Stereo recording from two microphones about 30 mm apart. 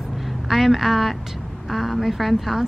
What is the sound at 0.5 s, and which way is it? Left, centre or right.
A woman's voice, centre.